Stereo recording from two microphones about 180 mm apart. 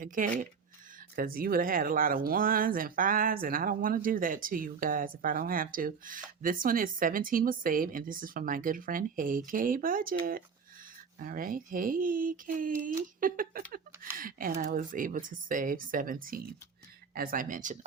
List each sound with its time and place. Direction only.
0.0 s speech: 45° right (ahead or behind)